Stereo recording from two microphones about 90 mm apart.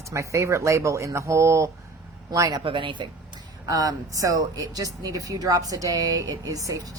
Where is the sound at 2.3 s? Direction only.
45° right (ahead or behind).